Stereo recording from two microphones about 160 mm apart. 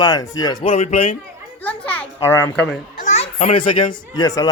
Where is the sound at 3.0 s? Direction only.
45° left (ahead or behind); by 4.5 s 20° left (ahead or behind).